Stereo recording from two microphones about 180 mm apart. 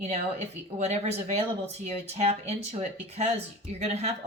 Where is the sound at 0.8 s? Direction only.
40° right (ahead or behind).